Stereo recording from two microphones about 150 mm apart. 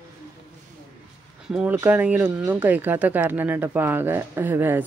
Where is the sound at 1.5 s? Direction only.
5° right (ahead or behind).